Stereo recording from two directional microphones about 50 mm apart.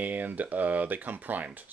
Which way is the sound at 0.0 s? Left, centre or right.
Right.